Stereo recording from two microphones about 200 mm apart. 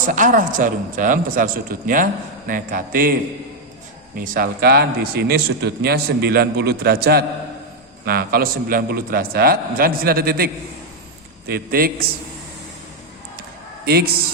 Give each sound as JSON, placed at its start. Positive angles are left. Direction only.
{"t": 0.0, "sound": "a man's voice", "side_deg": -40}
{"t": 4.2, "sound": "a man's voice", "side_deg": -50}
{"t": 13.8, "sound": "a man's voice", "side_deg": -50}